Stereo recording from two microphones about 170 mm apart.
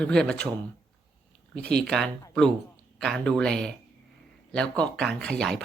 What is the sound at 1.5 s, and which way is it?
Speech, 5° left (ahead or behind).